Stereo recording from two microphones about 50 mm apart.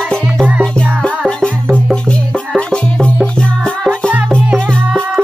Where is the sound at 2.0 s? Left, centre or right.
Left.